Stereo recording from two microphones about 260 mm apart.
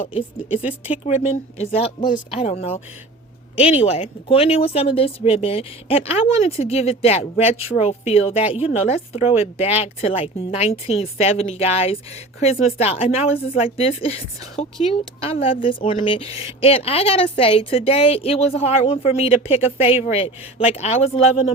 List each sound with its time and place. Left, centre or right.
0.5 s speech: centre
1.0 s a woman's voice: left